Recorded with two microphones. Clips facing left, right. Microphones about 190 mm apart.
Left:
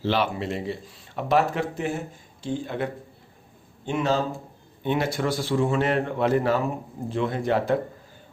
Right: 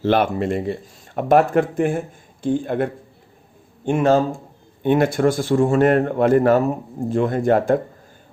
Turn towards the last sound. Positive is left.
turn(degrees=-50)  # may be behind; listen again after turning